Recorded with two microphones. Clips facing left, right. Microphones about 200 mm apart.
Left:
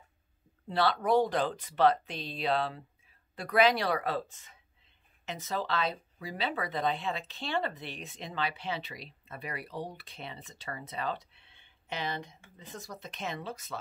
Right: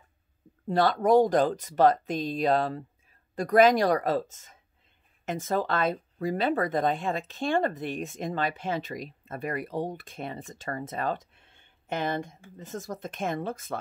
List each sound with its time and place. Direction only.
0.7 s speech: 45° right (ahead or behind)